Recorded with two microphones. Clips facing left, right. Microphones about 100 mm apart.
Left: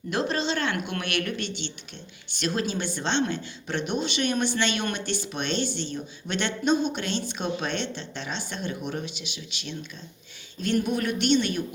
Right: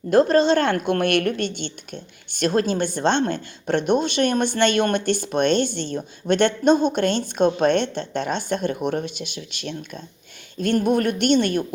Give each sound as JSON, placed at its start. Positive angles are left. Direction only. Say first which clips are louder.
{"t": 0.1, "sound": "a woman's voice", "louder": "right 11 dB", "side_deg": -50}